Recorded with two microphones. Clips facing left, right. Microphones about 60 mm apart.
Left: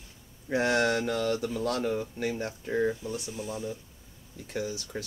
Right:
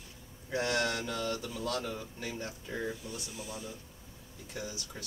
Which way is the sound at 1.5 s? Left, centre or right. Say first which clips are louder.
Left 7 dB; left.